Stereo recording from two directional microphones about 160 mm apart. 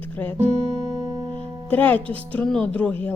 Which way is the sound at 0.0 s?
10° left (ahead or behind).